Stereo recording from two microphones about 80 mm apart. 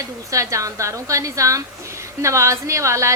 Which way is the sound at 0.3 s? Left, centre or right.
Right.